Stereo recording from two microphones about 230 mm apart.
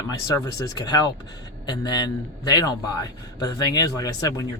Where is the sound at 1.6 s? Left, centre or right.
Centre.